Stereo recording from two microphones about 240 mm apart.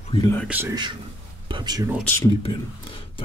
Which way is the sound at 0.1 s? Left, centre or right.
Centre.